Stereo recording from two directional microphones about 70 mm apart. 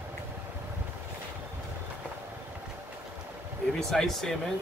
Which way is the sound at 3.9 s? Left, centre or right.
Centre.